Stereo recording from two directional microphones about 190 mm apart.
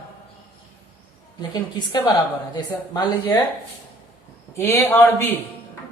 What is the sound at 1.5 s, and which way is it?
Speech, 20° left (ahead or behind).